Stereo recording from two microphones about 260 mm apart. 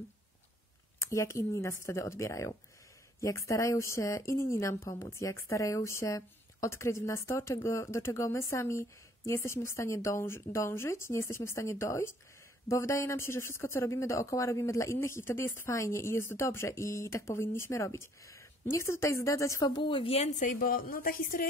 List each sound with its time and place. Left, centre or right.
1.0 s a woman's voice: centre; by 21.5 s left